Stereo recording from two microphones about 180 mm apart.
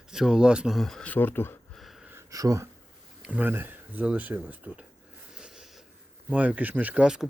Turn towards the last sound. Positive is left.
turn(degrees=-5)  # may be behind; listen again after turning